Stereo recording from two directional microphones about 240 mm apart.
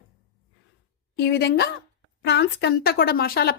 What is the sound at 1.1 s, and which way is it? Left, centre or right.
Speech, left.